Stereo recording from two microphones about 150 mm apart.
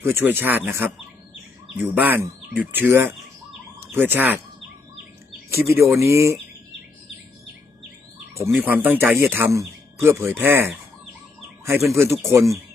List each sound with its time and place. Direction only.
0.0 s speech: 15° right (ahead or behind)
5.5 s speech: 15° right (ahead or behind)
8.5 s speech: 10° right (ahead or behind)
11.9 s speech: 15° right (ahead or behind)